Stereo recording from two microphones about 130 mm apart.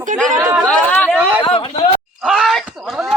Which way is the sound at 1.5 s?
40° left (ahead or behind).